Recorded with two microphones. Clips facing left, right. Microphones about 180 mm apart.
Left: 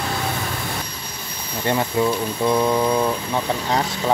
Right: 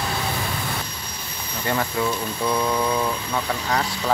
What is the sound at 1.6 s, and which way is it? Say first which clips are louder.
Speech: left 4 dB; 20° left (ahead or behind).